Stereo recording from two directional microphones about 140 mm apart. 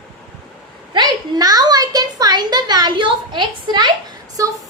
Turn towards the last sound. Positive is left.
turn(degrees=-25)  # may be behind; listen again after turning